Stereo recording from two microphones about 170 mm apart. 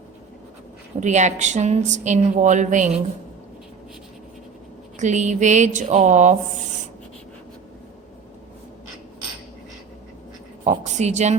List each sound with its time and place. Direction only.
0.9 s speech: 45° right (ahead or behind)
4.9 s speech: 45° right (ahead or behind)
10.6 s a woman's voice: 45° right (ahead or behind)